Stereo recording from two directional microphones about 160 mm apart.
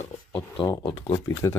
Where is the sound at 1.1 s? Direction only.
15° left (ahead or behind).